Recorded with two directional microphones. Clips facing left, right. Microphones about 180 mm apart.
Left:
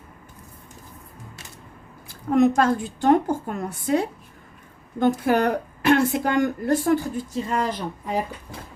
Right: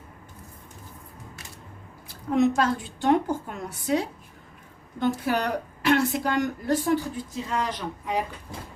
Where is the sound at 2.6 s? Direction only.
45° left (ahead or behind).